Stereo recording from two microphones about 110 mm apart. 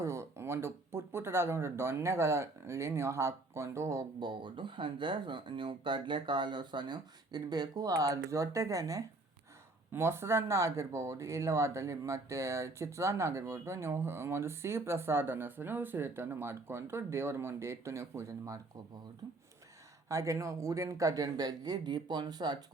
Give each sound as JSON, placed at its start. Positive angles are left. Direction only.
{"t": 0.0, "sound": "speech", "side_deg": -25}
{"t": 4.2, "sound": "speech", "side_deg": -45}